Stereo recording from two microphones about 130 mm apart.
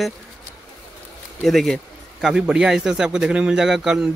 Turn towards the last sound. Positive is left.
turn(degrees=-5)  # may be behind; listen again after turning